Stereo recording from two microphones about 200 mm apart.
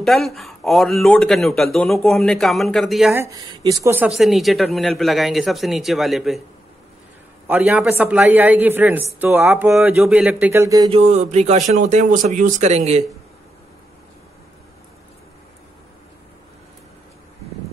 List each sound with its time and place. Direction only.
0.0 s speech: centre (ahead or behind)
3.1 s speech: 15° right (ahead or behind)
7.4 s speech: 10° right (ahead or behind)
10.9 s speech: 30° right (ahead or behind)